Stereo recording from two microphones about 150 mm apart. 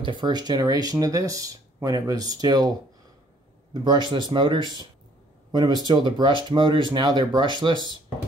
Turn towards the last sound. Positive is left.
turn(degrees=-30)  # may be behind; listen again after turning